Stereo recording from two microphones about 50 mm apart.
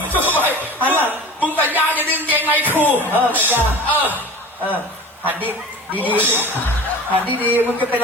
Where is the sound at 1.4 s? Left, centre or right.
Left.